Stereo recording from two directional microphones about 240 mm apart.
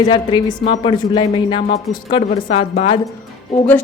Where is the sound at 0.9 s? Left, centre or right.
Centre.